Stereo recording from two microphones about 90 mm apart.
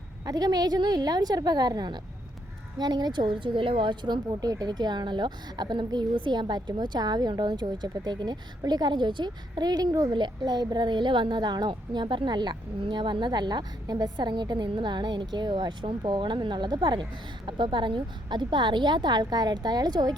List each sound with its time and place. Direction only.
0.3 s a woman's voice: 45° right (ahead or behind)
6.1 s a woman's voice: 65° right (ahead or behind); by 10.1 s 40° right (ahead or behind)
10.1 s a woman's voice: 60° right (ahead or behind)